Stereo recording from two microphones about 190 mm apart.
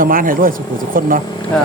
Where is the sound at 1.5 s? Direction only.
5° left (ahead or behind).